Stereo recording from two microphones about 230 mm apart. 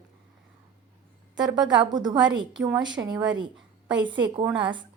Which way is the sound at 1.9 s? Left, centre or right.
Centre.